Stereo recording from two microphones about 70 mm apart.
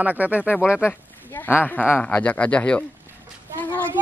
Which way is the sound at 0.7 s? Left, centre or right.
Left.